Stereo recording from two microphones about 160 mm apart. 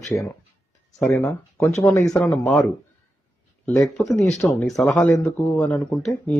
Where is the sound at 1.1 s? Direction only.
15° left (ahead or behind).